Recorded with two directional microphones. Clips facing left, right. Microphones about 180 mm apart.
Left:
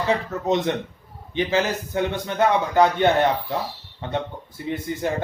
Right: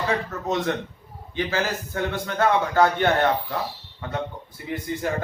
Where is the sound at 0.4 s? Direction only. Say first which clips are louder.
Left 4 dB; 20° left (ahead or behind).